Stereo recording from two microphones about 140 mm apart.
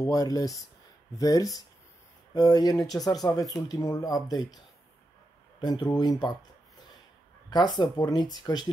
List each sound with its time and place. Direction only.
0.0 s speech: 25° left (ahead or behind)
5.6 s speech: 30° left (ahead or behind)
7.4 s speech: 30° left (ahead or behind)